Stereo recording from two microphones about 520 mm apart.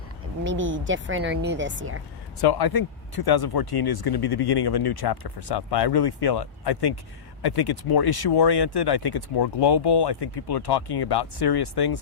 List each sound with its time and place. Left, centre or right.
0.4 s speech: right
2.4 s speech: left